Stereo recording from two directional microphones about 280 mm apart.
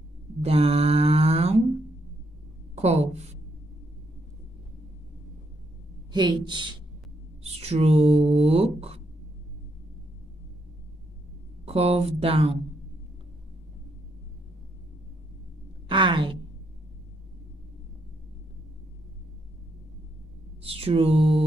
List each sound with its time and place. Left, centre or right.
0.4 s mantra: right
2.7 s a woman's voice: right
6.1 s a woman's voice: centre
11.6 s speech: right
15.9 s a woman's voice: centre
20.6 s speech: right